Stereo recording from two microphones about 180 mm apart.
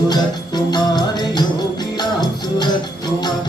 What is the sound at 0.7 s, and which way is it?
Music, 25° left (ahead or behind).